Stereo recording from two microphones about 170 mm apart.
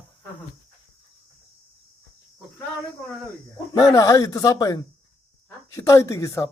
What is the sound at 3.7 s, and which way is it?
Speech, 20° left (ahead or behind).